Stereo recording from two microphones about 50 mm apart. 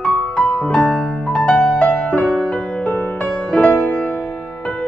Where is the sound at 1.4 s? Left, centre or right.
Centre.